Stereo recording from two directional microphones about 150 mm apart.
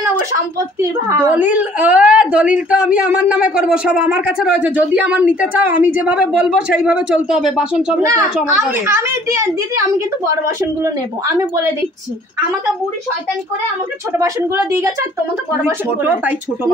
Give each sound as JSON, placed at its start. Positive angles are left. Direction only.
{"t": 0.7, "sound": "speech", "side_deg": -15}
{"t": 8.5, "sound": "a woman's voice", "side_deg": -20}
{"t": 14.1, "sound": "a woman's voice", "side_deg": -20}